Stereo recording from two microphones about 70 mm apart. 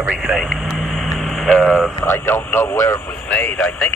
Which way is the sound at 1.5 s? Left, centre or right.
Left.